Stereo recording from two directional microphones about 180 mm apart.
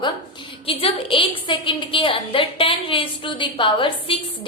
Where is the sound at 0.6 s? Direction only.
30° left (ahead or behind).